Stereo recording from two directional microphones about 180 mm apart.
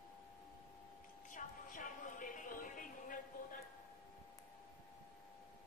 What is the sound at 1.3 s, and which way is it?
Music, 45° left (ahead or behind).